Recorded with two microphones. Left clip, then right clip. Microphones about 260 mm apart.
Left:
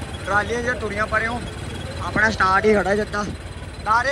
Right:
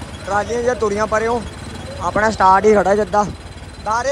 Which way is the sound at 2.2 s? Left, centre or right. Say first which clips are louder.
Right 5 dB; right.